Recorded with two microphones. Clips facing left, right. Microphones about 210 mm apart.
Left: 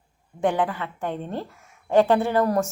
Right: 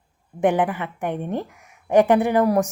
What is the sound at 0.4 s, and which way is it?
A woman's voice, 20° right (ahead or behind).